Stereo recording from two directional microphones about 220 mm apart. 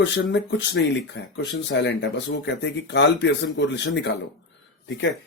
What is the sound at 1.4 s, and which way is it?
Speech, 55° left (ahead or behind).